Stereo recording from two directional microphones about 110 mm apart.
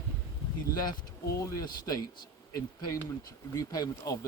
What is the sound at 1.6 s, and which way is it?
Speech, 35° left (ahead or behind).